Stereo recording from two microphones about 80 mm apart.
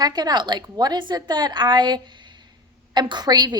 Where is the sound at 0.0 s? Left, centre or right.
Right.